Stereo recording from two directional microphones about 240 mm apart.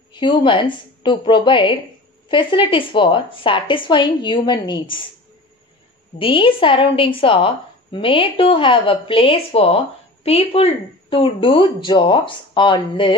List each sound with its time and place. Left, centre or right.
0.1 s a woman's voice: centre
6.1 s a woman's voice: left